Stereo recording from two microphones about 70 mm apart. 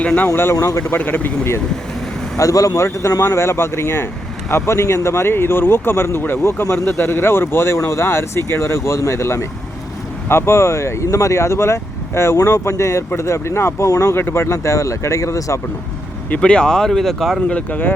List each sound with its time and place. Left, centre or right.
0.0 s speech: centre
0.6 s speech: left
0.9 s speech: left
2.4 s speech: left
14.5 s speech: left
16.4 s speech: centre
17.5 s speech: left